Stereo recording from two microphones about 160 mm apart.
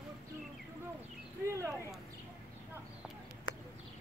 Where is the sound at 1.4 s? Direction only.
15° right (ahead or behind).